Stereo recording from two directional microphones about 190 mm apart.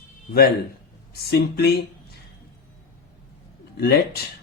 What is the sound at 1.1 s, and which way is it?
Speech, 55° left (ahead or behind).